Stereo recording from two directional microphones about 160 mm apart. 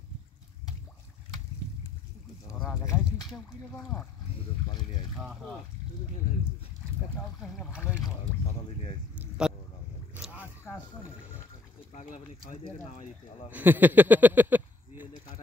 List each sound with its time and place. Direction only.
2.6 s a sound: 15° left (ahead or behind)
7.3 s speech: centre (ahead or behind)
9.4 s a sound: 5° right (ahead or behind)
10.4 s single-lens reflex camera: 15° left (ahead or behind)
11.9 s speech: 50° left (ahead or behind)
13.5 s speech: 10° right (ahead or behind)